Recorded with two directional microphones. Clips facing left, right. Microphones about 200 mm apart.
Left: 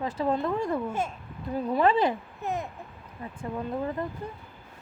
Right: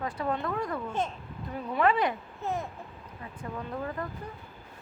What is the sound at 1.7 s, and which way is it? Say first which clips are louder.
Speech: left 3 dB; 30° left (ahead or behind).